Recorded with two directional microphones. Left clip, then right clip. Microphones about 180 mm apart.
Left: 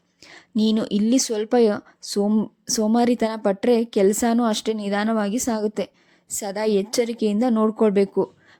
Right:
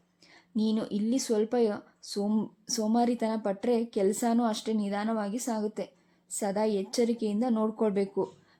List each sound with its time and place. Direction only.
0.3 s speech: 35° left (ahead or behind)